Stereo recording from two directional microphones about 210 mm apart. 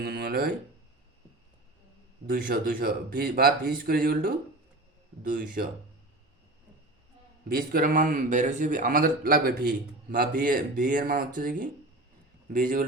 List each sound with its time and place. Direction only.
0.0 s a sound: 50° right (ahead or behind)
2.2 s speech: 45° right (ahead or behind)
7.4 s speech: 45° right (ahead or behind)